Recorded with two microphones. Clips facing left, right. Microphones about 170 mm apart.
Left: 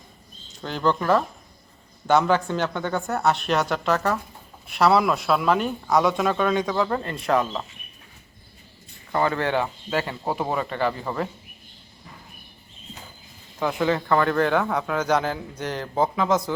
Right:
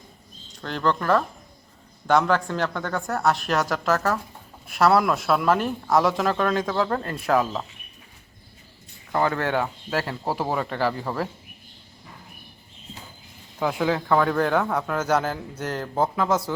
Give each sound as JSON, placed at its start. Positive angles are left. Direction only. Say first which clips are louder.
{"t": 0.6, "sound": "a man's voice", "louder": "left 1 dB", "side_deg": 0}
{"t": 9.1, "sound": "a man's voice", "louder": "even", "side_deg": -5}
{"t": 13.6, "sound": "a man's voice", "louder": "left 1 dB", "side_deg": -5}